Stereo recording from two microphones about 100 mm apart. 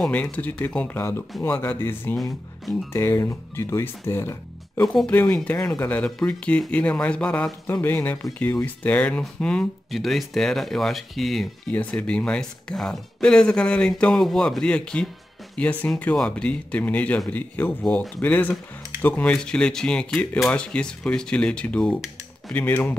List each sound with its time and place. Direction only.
0.1 s speech: 15° left (ahead or behind)
4.8 s speech: 5° left (ahead or behind)
7.6 s speech: 20° left (ahead or behind); by 11.4 s centre (ahead or behind)
11.7 s speech: 15° left (ahead or behind)